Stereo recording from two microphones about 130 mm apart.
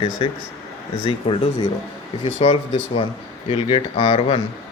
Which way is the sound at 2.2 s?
55° left (ahead or behind).